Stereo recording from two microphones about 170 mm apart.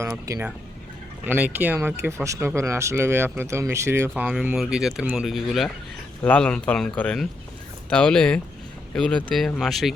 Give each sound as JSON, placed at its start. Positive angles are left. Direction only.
{"t": 0.0, "sound": "speech", "side_deg": -15}
{"t": 4.1, "sound": "speech", "side_deg": -5}